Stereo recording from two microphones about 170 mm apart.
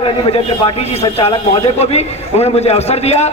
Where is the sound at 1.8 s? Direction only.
40° left (ahead or behind).